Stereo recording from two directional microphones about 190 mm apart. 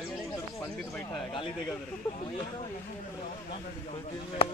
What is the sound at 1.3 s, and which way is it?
Speech, 25° left (ahead or behind).